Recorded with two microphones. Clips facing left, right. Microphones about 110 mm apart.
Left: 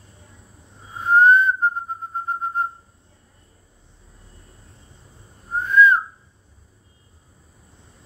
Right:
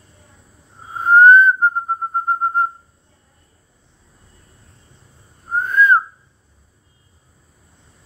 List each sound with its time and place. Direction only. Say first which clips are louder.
0.9 s whistling: right 5 dB; 45° right (ahead or behind)
5.5 s whistling: even; 50° right (ahead or behind)